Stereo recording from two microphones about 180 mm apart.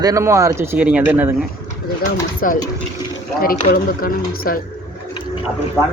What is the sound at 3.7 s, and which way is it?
Speech, 55° left (ahead or behind).